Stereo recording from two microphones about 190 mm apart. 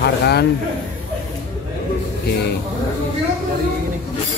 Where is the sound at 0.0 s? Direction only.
60° left (ahead or behind).